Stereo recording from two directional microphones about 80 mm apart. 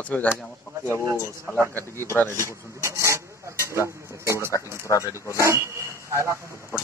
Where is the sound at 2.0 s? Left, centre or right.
Left.